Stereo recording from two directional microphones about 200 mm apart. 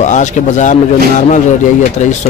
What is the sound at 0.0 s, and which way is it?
Speech, 35° left (ahead or behind).